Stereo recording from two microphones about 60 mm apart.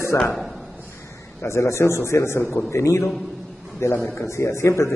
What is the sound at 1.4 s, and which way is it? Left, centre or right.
A man's voice, left.